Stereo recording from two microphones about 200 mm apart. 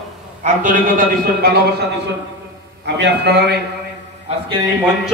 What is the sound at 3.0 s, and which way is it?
Speech, 55° right (ahead or behind).